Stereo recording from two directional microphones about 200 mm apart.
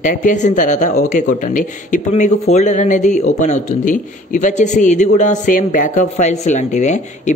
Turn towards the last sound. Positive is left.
turn(degrees=35)  # may be behind; listen again after turning